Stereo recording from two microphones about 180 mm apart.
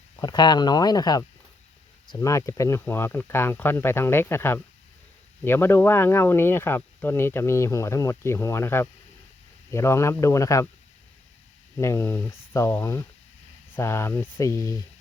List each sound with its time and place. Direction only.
0.2 s speech: 25° left (ahead or behind)
11.8 s speech: 15° left (ahead or behind)